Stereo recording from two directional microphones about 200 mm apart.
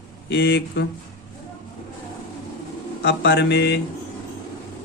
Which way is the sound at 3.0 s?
55° left (ahead or behind).